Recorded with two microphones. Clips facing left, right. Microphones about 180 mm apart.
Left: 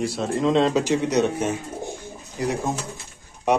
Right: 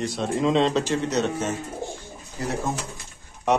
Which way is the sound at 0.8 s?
15° left (ahead or behind).